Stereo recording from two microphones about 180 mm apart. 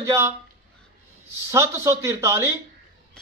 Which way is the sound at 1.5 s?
15° right (ahead or behind).